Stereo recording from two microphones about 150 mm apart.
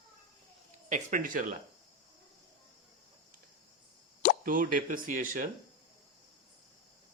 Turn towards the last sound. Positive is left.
turn(degrees=-60)  # may be behind; listen again after turning